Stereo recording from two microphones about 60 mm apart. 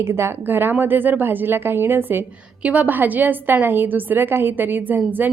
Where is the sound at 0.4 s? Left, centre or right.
Right.